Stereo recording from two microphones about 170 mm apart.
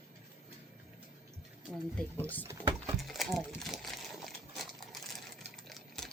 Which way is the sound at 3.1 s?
Centre (ahead or behind).